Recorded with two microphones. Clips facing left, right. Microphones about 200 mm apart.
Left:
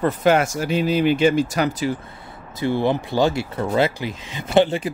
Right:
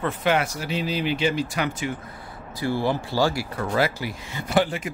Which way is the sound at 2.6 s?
20° left (ahead or behind).